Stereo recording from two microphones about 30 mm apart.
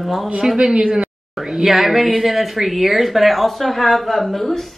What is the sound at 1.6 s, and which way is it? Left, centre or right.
A woman's voice, centre.